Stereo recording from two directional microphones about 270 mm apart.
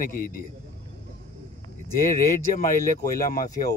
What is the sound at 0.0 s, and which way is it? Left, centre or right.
Speech, left.